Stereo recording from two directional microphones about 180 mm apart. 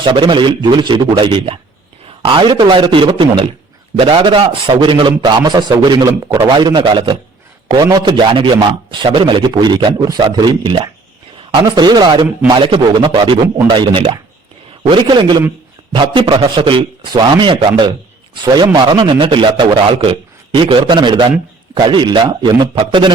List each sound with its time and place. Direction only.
0.0 s a man's voice: 25° right (ahead or behind)